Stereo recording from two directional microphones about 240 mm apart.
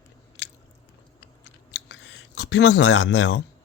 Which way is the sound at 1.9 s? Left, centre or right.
Left.